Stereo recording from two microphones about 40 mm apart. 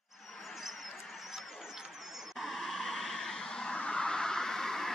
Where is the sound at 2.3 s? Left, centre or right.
Centre.